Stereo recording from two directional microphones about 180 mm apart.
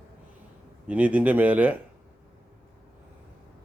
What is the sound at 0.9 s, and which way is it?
Speech, 10° right (ahead or behind).